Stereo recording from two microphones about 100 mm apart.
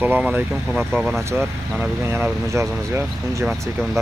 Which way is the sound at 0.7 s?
5° right (ahead or behind).